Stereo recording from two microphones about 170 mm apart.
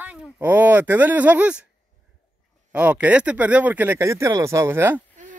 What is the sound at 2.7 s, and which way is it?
Speech, 10° right (ahead or behind).